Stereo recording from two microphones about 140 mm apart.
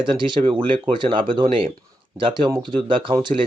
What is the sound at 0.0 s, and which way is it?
Speech, 35° right (ahead or behind).